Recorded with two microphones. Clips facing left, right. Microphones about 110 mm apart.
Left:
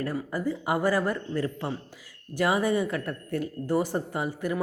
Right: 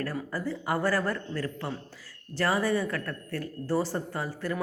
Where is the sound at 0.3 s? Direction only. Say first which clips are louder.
Left 3 dB; 20° left (ahead or behind).